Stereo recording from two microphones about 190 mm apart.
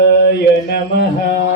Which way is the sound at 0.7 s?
60° left (ahead or behind).